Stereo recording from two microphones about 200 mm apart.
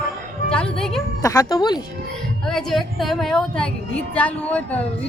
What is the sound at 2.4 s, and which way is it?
A woman's voice, centre (ahead or behind).